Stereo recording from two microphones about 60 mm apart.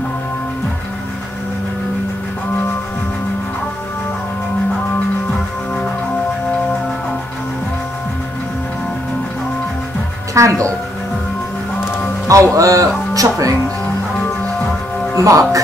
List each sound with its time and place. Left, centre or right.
10.3 s a woman's voice: right
12.3 s speech: right
15.2 s a woman's voice: right